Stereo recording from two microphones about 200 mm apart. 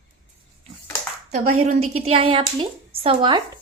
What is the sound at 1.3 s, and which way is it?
A woman's voice, 30° right (ahead or behind).